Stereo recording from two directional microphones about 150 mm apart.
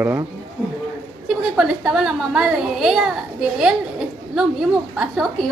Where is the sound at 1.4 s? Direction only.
Centre (ahead or behind).